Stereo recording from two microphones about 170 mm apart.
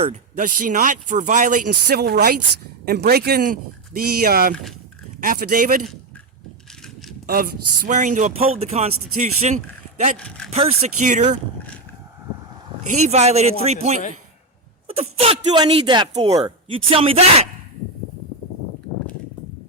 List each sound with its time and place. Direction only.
0.0 s a man's voice: 45° right (ahead or behind)
1.9 s a man's voice: 70° right (ahead or behind); by 5.9 s 50° right (ahead or behind)
7.3 s a man's voice: 60° right (ahead or behind); by 9.6 s 40° right (ahead or behind)
10.2 s speech: 5° left (ahead or behind)
10.5 s a man's voice: 35° right (ahead or behind)
12.8 s a man's voice: 45° right (ahead or behind)